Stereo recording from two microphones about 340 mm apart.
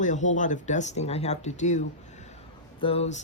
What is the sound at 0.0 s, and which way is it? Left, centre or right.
Speech, left.